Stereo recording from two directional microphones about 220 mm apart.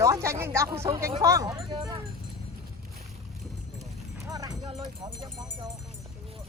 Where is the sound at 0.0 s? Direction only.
15° right (ahead or behind).